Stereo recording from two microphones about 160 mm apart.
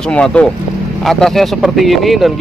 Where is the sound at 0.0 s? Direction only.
5° left (ahead or behind).